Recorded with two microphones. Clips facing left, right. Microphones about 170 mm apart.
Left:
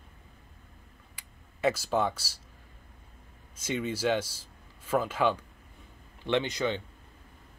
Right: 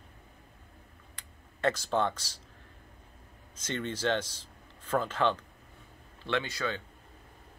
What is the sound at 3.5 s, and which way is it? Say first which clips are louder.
Speech: left 3 dB; 10° left (ahead or behind).